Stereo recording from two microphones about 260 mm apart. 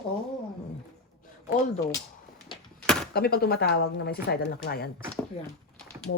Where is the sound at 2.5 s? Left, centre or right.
Centre.